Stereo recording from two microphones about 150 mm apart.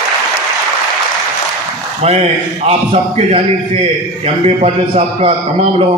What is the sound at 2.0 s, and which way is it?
A man's voice, 45° right (ahead or behind).